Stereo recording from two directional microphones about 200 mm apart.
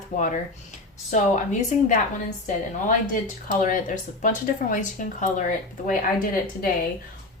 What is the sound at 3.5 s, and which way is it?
A woman's voice, 40° left (ahead or behind).